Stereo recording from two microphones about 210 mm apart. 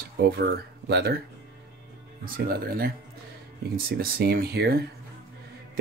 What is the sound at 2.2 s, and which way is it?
Speech, 45° right (ahead or behind).